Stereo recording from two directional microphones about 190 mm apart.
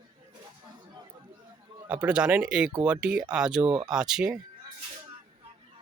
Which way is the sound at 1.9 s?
5° right (ahead or behind).